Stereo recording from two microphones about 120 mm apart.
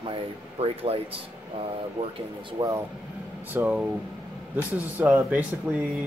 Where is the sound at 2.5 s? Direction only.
30° right (ahead or behind).